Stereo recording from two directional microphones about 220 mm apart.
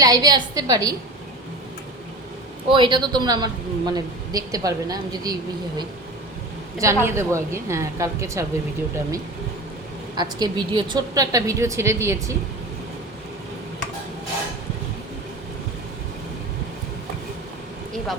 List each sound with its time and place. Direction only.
0.0 s a woman's voice: 15° right (ahead or behind)
2.6 s a woman's voice: 20° right (ahead or behind)
10.2 s a woman's voice: 20° right (ahead or behind)